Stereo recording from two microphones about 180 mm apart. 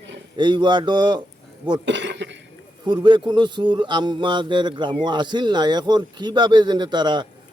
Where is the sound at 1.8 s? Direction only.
80° right.